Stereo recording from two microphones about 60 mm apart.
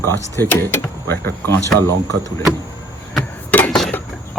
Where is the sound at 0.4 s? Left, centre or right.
Left.